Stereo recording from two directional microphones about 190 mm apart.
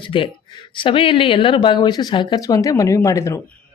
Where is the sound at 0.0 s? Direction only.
25° left (ahead or behind).